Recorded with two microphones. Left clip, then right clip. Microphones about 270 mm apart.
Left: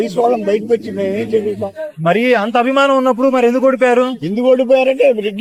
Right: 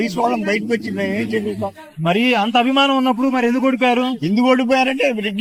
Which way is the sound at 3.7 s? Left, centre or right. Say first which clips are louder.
Left 5 dB; centre.